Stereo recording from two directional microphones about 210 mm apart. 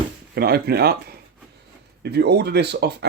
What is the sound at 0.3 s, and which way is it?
Speech, 45° right (ahead or behind).